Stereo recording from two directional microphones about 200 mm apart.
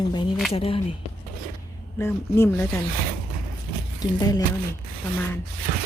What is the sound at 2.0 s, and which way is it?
Speech, 15° left (ahead or behind).